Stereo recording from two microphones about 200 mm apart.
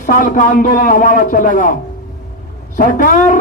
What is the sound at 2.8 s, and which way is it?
Speech, 40° left (ahead or behind).